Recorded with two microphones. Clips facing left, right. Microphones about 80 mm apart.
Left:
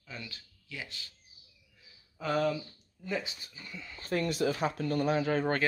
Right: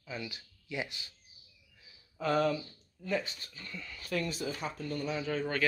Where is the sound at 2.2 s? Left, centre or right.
Centre.